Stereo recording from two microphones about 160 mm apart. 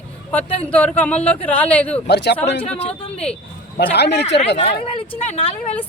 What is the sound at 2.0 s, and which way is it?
Speech, 90° left.